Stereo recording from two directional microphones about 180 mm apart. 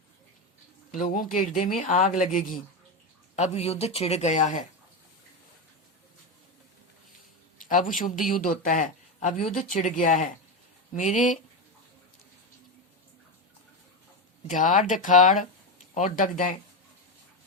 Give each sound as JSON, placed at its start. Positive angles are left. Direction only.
{"t": 0.9, "sound": "a man's voice", "side_deg": 50}
{"t": 7.6, "sound": "a man's voice", "side_deg": 45}
{"t": 14.4, "sound": "a man's voice", "side_deg": 45}